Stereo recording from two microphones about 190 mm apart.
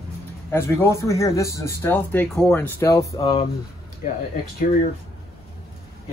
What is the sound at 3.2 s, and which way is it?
Speech, 30° left (ahead or behind).